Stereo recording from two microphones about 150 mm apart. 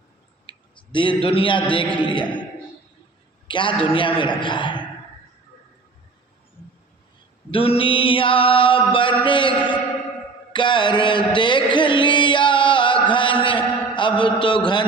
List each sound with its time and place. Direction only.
0.5 s clicking: 30° left (ahead or behind)
0.9 s mantra: 35° left (ahead or behind)
3.4 s mantra: 35° left (ahead or behind)
7.5 s mantra: 40° left (ahead or behind)
11.3 s music: 30° left (ahead or behind)
14.3 s mantra: 30° left (ahead or behind)